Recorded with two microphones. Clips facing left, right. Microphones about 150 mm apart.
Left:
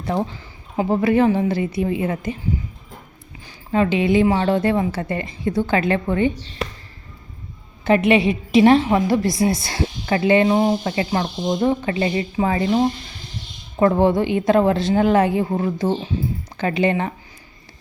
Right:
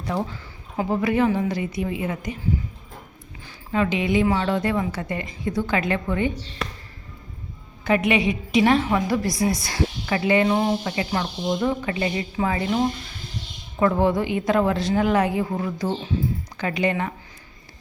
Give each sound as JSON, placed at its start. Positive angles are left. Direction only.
{"t": 0.0, "sound": "a woman's voice", "side_deg": 25}
{"t": 3.7, "sound": "a woman's voice", "side_deg": 30}
{"t": 7.9, "sound": "a woman's voice", "side_deg": 30}
{"t": 10.8, "sound": "a woman's voice", "side_deg": 35}